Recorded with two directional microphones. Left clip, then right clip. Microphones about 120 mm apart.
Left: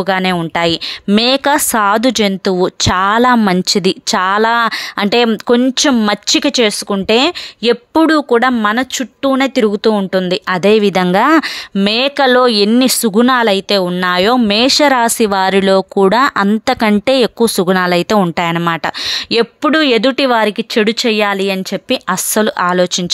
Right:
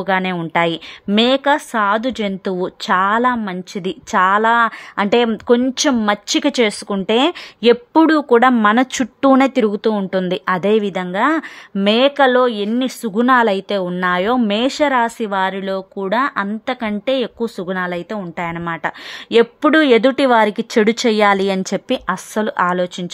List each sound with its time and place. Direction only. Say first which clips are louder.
0.0 s speech: left 4 dB; 20° left (ahead or behind); by 2.2 s 40° left (ahead or behind)
2.2 s speech: left 7 dB; 25° left (ahead or behind)
6.4 s a woman's voice: left 4 dB; 15° left (ahead or behind)
7.2 s speech: even; 5° left (ahead or behind)
8.7 s a woman's voice: even; 15° right (ahead or behind)
9.6 s a woman's voice: left 4 dB; 20° left (ahead or behind)
10.6 s speech: left 10 dB; 25° left (ahead or behind)
11.1 s speech: left 6 dB; 45° left (ahead or behind)
11.7 s speech: even; 20° left (ahead or behind)
12.3 s speech: left 5 dB; 35° left (ahead or behind)
13.3 s speech: right 1 dB; 15° left (ahead or behind); by 18.8 s 40° left (ahead or behind)
19.6 s speech: left 2 dB; 15° left (ahead or behind)
22.0 s speech: left 6 dB; 20° left (ahead or behind)